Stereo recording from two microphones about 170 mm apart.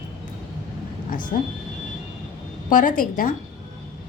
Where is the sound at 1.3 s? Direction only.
50° left (ahead or behind).